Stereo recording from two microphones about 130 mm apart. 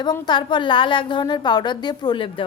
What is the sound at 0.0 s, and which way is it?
A woman's voice, 35° left (ahead or behind).